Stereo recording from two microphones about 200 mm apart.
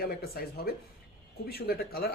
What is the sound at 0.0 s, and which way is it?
Speech, 50° left (ahead or behind).